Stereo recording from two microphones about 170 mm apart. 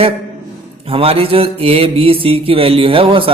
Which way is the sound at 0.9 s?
35° right (ahead or behind).